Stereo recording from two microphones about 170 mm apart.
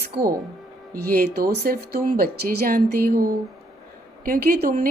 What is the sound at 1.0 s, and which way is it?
A woman's voice, 65° right (ahead or behind).